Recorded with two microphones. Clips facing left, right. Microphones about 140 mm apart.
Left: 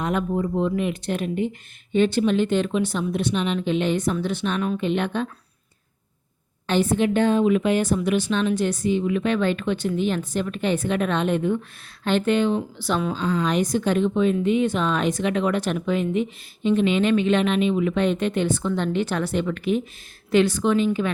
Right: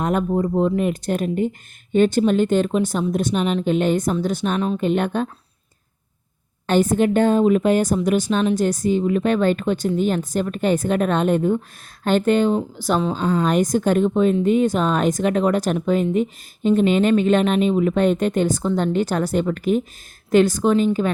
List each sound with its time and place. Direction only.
0.0 s speech: 45° right (ahead or behind)
6.7 s speech: 45° right (ahead or behind)